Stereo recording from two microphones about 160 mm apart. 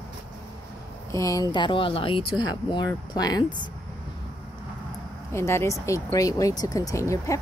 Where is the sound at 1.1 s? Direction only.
20° left (ahead or behind).